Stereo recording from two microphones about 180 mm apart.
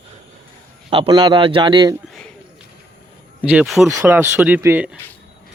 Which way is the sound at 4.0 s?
10° right (ahead or behind).